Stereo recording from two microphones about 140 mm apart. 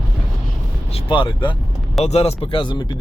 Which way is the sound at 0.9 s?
40° left (ahead or behind).